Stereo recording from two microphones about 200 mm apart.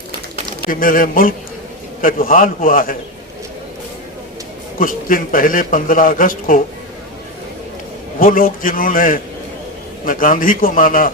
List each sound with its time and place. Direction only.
0.7 s a man's voice: 45° left (ahead or behind)
4.8 s a man's voice: 45° left (ahead or behind)
8.2 s a man's voice: 45° left (ahead or behind)